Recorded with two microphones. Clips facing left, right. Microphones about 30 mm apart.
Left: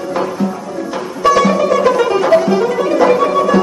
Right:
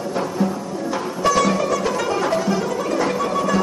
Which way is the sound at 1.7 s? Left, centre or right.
Left.